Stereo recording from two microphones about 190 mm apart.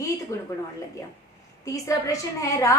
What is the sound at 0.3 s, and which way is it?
Speech, 15° left (ahead or behind).